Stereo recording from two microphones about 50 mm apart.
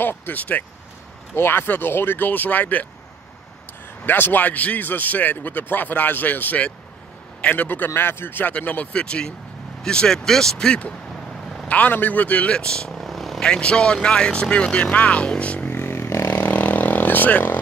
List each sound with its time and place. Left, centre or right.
0.0 s speech: left
0.4 s a man's voice: left
1.3 s a man's voice: left
4.0 s a man's voice: left
7.9 s a man's voice: left; by 10.7 s centre
10.7 s speech: left
11.6 s a man's voice: left
12.5 s speech: centre
12.9 s vehicle: centre
13.4 s speech: centre
15.7 s a sound: left
16.1 s vehicle: left
16.3 s vehicle: left